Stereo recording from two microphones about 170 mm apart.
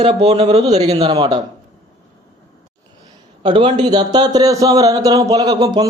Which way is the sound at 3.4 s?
30° right (ahead or behind).